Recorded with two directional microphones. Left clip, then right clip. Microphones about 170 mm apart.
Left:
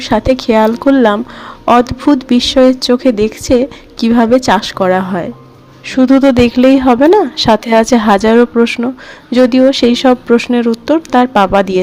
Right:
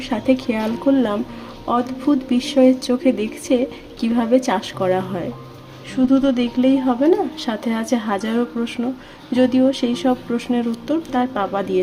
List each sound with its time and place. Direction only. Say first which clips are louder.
0.0 s speech: left 8 dB; 40° left (ahead or behind)
5.8 s speech: left 9 dB; 45° left (ahead or behind)